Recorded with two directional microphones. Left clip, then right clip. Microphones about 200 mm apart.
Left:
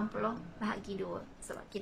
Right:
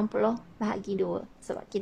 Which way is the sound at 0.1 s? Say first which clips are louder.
Right 9 dB; 40° right (ahead or behind).